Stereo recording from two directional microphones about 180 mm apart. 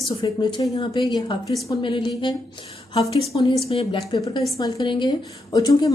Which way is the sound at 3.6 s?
30° left (ahead or behind).